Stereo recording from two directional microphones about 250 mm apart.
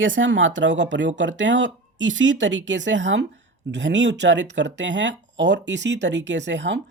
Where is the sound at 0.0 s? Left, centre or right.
Right.